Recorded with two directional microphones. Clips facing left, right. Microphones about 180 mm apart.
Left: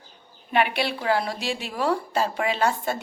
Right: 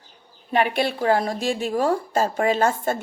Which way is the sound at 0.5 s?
45° right (ahead or behind).